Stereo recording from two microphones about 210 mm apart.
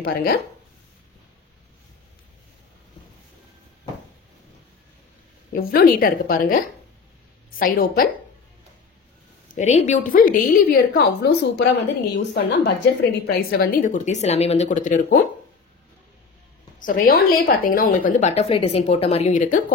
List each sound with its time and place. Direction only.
0.0 s a woman's voice: 50° left (ahead or behind)
5.5 s a woman's voice: 45° left (ahead or behind)
9.5 s a woman's voice: 35° left (ahead or behind)
16.8 s a woman's voice: 40° left (ahead or behind)